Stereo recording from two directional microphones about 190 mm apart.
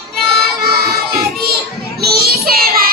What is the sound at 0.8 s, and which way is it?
Child singing, 55° right (ahead or behind).